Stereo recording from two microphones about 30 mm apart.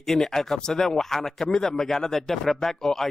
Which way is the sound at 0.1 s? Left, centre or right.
Centre.